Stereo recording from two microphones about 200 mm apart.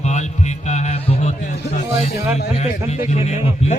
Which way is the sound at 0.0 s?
35° left (ahead or behind).